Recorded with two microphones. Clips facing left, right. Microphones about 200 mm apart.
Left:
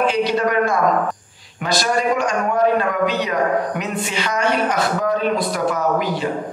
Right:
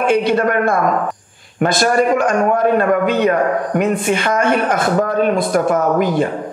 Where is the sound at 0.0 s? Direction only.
55° right (ahead or behind).